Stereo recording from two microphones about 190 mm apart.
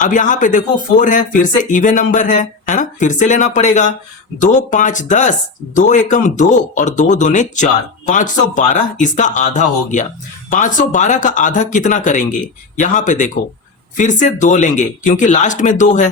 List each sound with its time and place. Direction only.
0.0 s speech: 40° left (ahead or behind)